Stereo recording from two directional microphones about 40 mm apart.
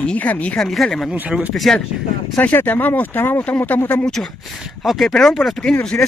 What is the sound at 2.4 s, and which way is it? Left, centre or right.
Speech, left.